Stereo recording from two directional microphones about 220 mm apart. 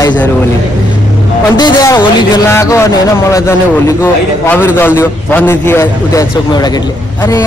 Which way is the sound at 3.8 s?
10° left (ahead or behind).